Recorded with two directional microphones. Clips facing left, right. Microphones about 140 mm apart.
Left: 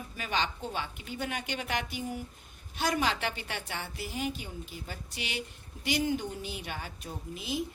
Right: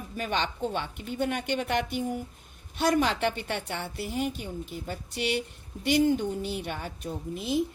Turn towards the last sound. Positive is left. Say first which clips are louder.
# right 6 dB
turn(degrees=-55)  # may be behind; listen again after turning